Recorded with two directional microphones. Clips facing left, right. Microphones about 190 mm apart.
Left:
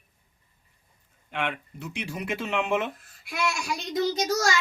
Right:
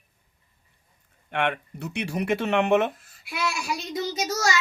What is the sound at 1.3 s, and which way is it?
Speech, 65° right (ahead or behind).